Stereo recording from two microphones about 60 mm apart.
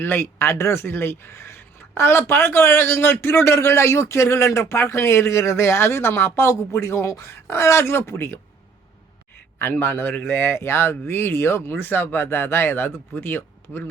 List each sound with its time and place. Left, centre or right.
0.0 s speech: left
9.8 s speech: left
10.4 s speech: left